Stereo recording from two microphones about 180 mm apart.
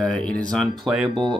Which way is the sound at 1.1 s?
25° right (ahead or behind).